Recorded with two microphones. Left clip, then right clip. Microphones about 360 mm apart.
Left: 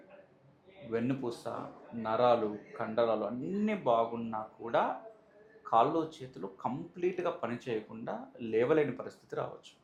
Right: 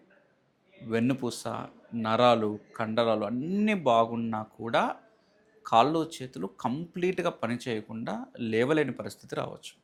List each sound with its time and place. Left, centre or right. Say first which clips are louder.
0.9 s speech: right 5 dB; right